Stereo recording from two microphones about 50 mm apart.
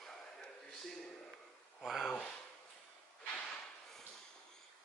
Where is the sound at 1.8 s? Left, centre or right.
Centre.